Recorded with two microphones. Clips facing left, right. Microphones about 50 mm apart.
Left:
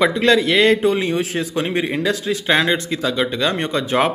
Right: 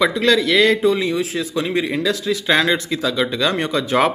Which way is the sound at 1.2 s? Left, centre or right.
Left.